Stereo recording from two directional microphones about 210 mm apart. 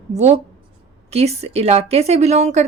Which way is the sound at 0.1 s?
30° right (ahead or behind).